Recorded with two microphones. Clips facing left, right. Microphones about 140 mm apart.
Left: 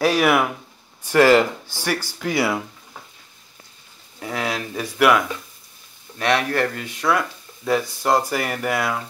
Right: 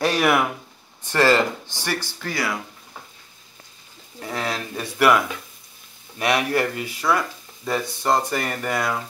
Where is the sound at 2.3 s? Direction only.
25° left (ahead or behind).